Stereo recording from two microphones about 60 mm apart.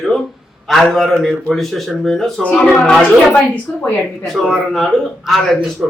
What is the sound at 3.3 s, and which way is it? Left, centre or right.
Speech, left.